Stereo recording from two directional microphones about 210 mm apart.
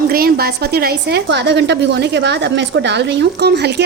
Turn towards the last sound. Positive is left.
turn(degrees=-50)  # may be behind; listen again after turning